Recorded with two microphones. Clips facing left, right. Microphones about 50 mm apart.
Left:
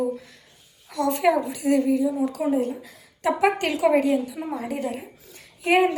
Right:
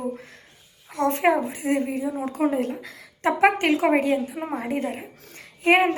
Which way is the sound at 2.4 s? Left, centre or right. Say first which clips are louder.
Even; right.